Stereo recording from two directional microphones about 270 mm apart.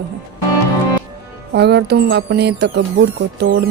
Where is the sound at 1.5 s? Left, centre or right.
Right.